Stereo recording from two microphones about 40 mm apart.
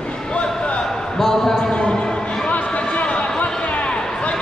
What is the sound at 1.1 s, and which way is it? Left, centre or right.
Speech, centre.